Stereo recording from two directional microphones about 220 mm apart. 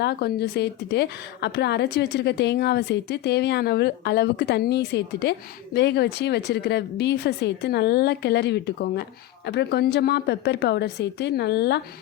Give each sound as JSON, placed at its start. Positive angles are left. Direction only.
{"t": 0.0, "sound": "a woman's voice", "side_deg": 50}